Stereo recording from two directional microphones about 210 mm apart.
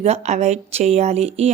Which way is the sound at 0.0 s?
30° right (ahead or behind).